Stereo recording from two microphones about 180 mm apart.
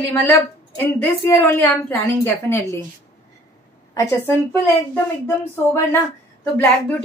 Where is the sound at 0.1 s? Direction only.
10° left (ahead or behind).